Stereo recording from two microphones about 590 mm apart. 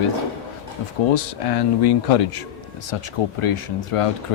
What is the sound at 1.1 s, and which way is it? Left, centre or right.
Mantra, left.